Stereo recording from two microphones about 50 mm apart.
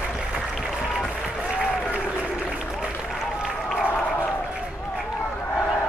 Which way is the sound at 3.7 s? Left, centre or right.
Left.